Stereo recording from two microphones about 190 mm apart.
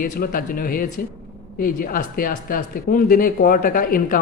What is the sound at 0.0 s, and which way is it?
A man's voice, 50° left (ahead or behind).